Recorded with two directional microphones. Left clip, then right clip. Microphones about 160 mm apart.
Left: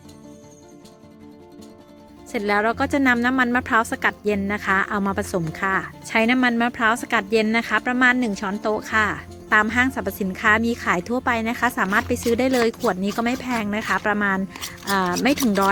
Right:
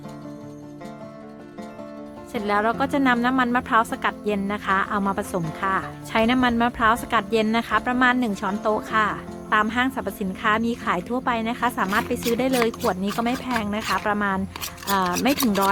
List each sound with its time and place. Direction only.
2.3 s a woman's voice: 30° left (ahead or behind)